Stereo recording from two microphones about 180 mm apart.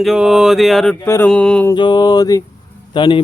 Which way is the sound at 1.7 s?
25° left (ahead or behind).